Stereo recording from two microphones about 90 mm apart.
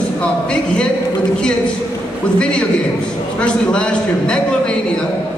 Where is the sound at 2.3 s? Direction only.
10° left (ahead or behind).